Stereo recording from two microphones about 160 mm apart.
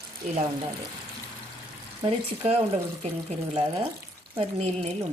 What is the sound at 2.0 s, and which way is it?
Speech, 40° right (ahead or behind).